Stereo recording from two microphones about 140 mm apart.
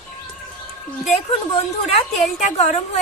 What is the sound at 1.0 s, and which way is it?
A woman's voice, 50° left (ahead or behind).